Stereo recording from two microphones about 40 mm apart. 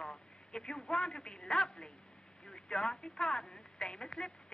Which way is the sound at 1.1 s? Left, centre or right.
Left.